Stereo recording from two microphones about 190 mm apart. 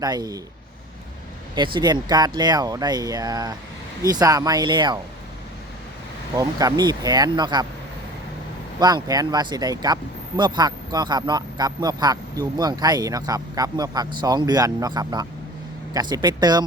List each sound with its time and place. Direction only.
0.0 s speech: 20° right (ahead or behind)
1.5 s speech: 25° right (ahead or behind)
6.3 s speech: 20° right (ahead or behind)
8.8 s speech: 20° right (ahead or behind)